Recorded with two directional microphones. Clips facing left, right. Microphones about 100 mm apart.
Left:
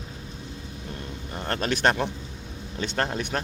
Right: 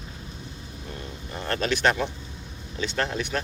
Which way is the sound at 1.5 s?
45° left (ahead or behind).